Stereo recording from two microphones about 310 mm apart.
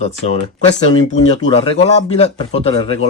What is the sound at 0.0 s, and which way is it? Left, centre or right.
Speech, left.